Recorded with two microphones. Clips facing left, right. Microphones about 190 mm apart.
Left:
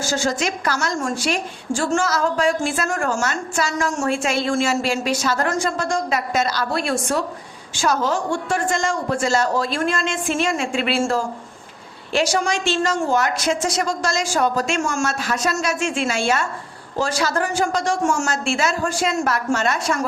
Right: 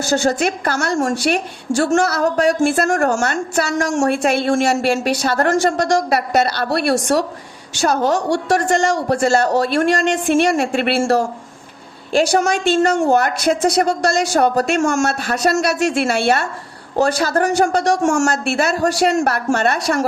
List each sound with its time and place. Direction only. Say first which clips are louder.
0.0 s a woman's voice: right 5 dB; 65° right (ahead or behind)
1.0 s a woman's voice: right 5 dB; 65° right (ahead or behind)
4.0 s a woman's voice: right 5 dB; 60° right (ahead or behind)
12.1 s a woman's voice: right 5 dB; 50° right (ahead or behind); by 20.1 s 65° right (ahead or behind)